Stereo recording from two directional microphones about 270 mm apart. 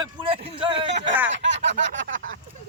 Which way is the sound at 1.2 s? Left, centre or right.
Right.